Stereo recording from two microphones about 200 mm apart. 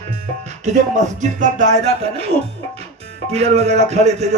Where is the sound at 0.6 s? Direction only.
35° right (ahead or behind).